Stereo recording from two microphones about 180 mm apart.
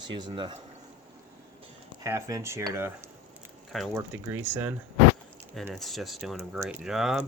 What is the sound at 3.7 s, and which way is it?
Speech, centre (ahead or behind).